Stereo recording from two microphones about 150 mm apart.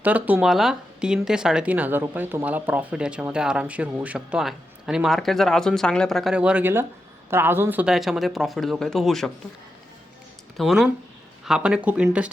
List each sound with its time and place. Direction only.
0.0 s speech: 10° right (ahead or behind)
10.6 s speech: centre (ahead or behind)